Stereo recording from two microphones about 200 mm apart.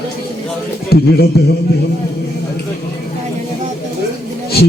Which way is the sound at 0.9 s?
50° left (ahead or behind).